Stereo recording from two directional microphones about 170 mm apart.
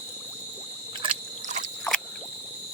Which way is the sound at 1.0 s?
40° right (ahead or behind).